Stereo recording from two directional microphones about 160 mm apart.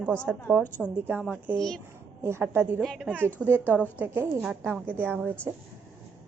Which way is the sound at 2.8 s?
Centre (ahead or behind).